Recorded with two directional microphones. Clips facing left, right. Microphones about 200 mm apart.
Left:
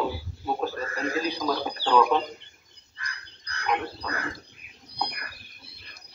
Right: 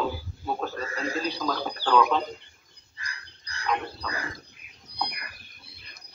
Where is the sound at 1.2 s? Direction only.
10° left (ahead or behind).